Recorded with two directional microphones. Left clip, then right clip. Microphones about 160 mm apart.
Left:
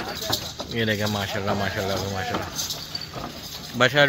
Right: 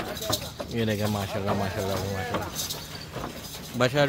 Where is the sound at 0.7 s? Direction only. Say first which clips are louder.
Left 4 dB; 5° right (ahead or behind).